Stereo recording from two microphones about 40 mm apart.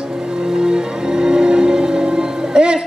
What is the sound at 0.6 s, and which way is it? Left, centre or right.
Music, centre.